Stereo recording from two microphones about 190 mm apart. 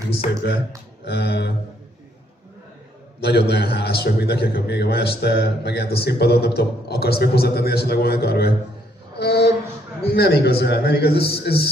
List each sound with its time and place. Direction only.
1.0 s a man's voice: 60° left (ahead or behind)
3.2 s a man's voice: 60° left (ahead or behind)
9.1 s a sound: 60° left (ahead or behind)
10.0 s a man's voice: 55° left (ahead or behind)